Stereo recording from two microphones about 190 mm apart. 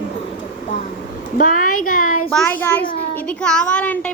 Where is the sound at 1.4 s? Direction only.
45° left (ahead or behind).